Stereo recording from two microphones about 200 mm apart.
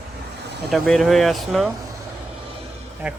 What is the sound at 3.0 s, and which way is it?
Speech, 5° right (ahead or behind).